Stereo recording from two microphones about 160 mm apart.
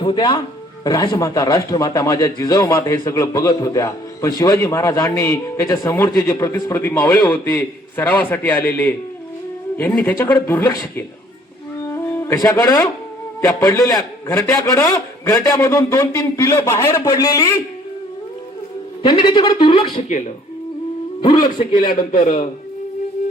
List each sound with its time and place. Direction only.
0.0 s a man's voice: 30° left (ahead or behind); by 11.0 s 15° left (ahead or behind)
11.9 s music: 15° left (ahead or behind)
13.6 s a man's voice: 15° left (ahead or behind)
19.0 s speech: 30° left (ahead or behind)
20.0 s a man's voice: 50° left (ahead or behind)
21.2 s a man's voice: 25° left (ahead or behind)
21.8 s a man's voice: 55° left (ahead or behind)